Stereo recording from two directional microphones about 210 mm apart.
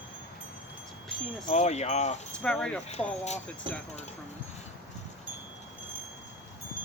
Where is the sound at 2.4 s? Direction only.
5° left (ahead or behind).